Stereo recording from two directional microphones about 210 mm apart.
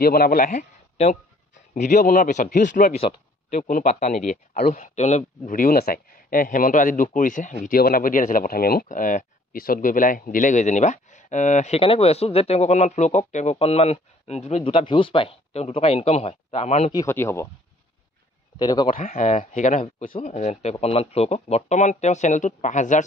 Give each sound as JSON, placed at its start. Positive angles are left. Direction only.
{"t": 0.0, "sound": "a man's voice", "side_deg": 45}
{"t": 16.9, "sound": "speech", "side_deg": 15}
{"t": 18.6, "sound": "speech", "side_deg": 20}
{"t": 18.9, "sound": "a man's voice", "side_deg": 35}